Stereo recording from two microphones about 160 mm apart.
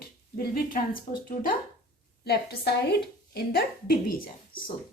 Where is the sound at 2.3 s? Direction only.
90° left.